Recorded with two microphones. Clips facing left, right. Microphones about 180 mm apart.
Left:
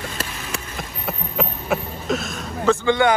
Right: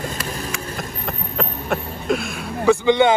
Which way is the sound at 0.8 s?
5° left (ahead or behind).